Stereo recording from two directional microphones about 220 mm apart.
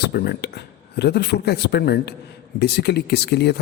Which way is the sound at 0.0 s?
45° left (ahead or behind).